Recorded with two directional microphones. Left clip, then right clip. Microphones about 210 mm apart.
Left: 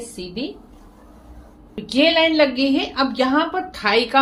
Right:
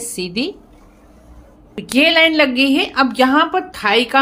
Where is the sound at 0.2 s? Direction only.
45° right (ahead or behind).